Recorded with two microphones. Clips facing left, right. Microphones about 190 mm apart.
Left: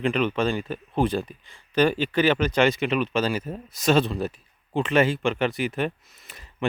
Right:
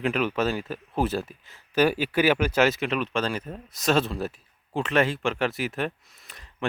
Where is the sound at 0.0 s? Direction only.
5° right (ahead or behind).